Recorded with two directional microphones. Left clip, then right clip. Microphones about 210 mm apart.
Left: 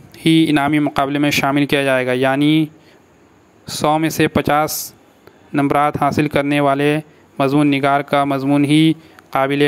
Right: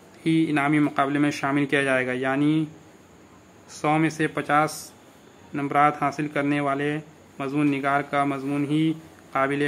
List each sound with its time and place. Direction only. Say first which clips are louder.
0.1 s a man's voice: left 9 dB; 40° left (ahead or behind)
3.6 s a man's voice: left 7 dB; 35° left (ahead or behind)